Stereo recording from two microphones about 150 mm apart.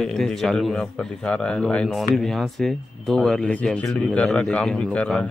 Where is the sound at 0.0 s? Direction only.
5° left (ahead or behind).